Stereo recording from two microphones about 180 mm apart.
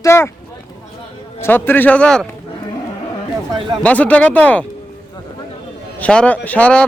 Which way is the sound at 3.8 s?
10° left (ahead or behind).